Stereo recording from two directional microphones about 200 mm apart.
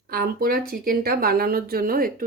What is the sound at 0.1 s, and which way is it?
Speech, 45° right (ahead or behind).